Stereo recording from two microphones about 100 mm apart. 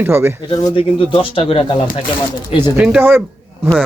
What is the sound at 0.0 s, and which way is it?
Speech, 25° right (ahead or behind).